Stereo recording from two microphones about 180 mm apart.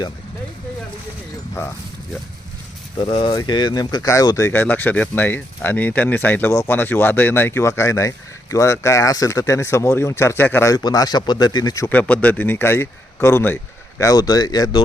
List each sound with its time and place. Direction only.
3.0 s speech: 30° left (ahead or behind)